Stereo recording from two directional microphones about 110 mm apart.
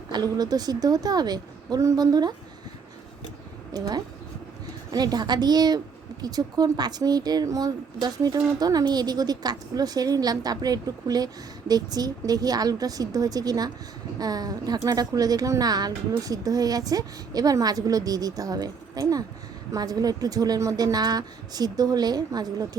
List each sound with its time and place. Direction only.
0.1 s speech: 40° right (ahead or behind)
3.7 s speech: 35° right (ahead or behind)